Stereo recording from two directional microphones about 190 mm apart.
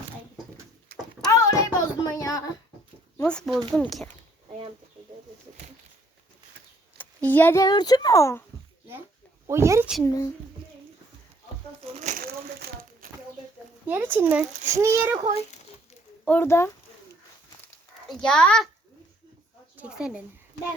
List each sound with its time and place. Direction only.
1.3 s a sound: 15° left (ahead or behind)
3.2 s a child's voice: 5° left (ahead or behind)
7.3 s a child's voice: 10° left (ahead or behind)
9.5 s a child's voice: 15° right (ahead or behind)
10.0 s a child's voice: 20° left (ahead or behind)
11.9 s crumpling: 45° right (ahead or behind)
13.8 s a child's voice: 10° right (ahead or behind)
16.2 s a child's voice: 10° left (ahead or behind)
18.1 s a child's voice: 5° left (ahead or behind)
19.7 s a sound: 5° right (ahead or behind)